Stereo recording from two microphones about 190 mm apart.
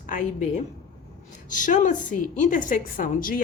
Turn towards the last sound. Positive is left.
turn(degrees=45)  # may be behind; listen again after turning